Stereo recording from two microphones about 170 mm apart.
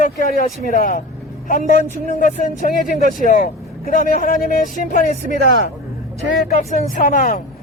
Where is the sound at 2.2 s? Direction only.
50° left (ahead or behind).